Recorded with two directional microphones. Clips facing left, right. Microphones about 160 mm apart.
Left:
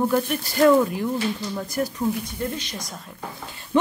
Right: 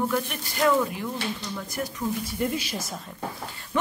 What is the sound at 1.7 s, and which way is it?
Speech, 40° left (ahead or behind).